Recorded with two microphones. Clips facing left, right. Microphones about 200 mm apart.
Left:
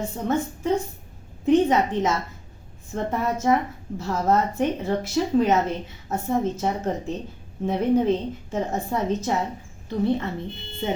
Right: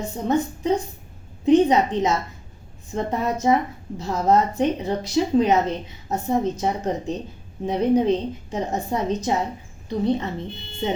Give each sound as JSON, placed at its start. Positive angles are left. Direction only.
{"t": 0.3, "sound": "a woman's voice", "side_deg": -20}